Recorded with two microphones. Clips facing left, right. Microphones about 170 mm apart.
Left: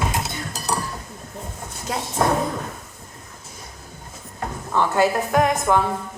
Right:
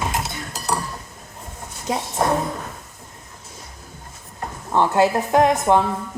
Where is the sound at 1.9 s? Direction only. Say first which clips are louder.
Right 3 dB; 15° right (ahead or behind).